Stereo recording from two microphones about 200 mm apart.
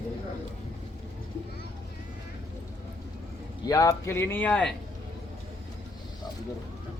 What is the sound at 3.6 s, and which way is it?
Speech, 15° left (ahead or behind).